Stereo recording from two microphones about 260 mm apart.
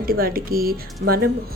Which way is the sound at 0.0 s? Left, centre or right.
Right.